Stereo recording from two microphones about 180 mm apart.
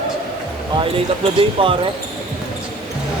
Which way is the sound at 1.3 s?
30° right (ahead or behind).